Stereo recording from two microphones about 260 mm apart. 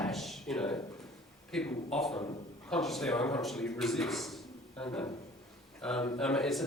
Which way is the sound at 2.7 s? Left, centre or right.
Centre.